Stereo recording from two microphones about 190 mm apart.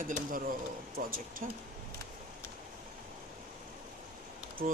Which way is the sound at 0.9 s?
50° right (ahead or behind).